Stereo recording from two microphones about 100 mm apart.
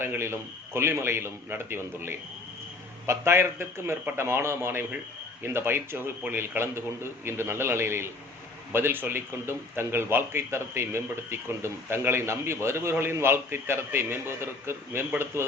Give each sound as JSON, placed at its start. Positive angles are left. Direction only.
{"t": 0.0, "sound": "speech", "side_deg": -25}